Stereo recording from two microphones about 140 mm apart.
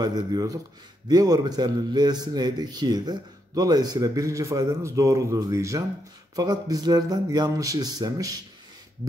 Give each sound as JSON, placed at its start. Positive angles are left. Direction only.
{"t": 0.0, "sound": "a man's voice", "side_deg": -30}